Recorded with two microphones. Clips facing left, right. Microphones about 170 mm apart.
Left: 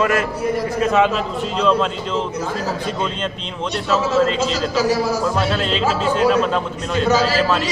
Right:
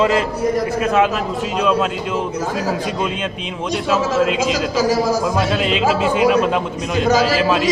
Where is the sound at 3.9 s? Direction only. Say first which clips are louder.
Even; 10° right (ahead or behind).